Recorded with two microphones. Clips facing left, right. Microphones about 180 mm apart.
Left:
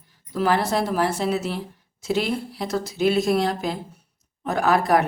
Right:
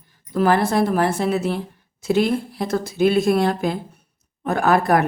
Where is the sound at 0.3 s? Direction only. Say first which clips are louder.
Right 4 dB; 55° right (ahead or behind).